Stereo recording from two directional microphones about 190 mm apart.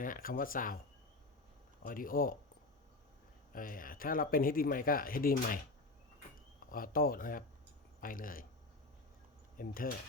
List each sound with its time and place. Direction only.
0.0 s speech: 45° left (ahead or behind)
1.8 s speech: 45° left (ahead or behind)
3.5 s speech: 45° left (ahead or behind)
6.6 s speech: 50° left (ahead or behind)
9.6 s speech: 50° left (ahead or behind)